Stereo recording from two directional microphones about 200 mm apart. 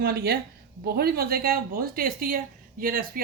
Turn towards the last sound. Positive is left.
turn(degrees=-45)  # may be behind; listen again after turning